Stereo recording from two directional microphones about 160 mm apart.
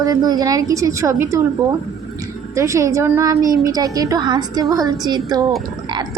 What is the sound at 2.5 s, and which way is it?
A woman's voice, 20° right (ahead or behind).